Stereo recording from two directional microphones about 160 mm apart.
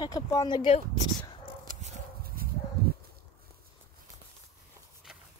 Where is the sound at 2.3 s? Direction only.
65° right (ahead or behind).